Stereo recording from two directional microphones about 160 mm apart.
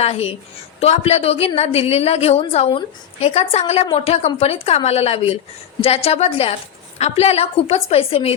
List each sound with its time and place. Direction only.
0.0 s a woman's voice: 40° left (ahead or behind)